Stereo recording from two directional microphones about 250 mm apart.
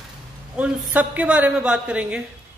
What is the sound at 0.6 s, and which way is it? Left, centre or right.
A man's voice, centre.